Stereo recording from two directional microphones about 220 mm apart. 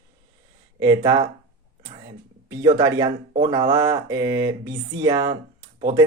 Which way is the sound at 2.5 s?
15° right (ahead or behind).